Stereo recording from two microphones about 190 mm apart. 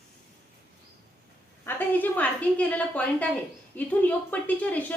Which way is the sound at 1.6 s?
10° left (ahead or behind).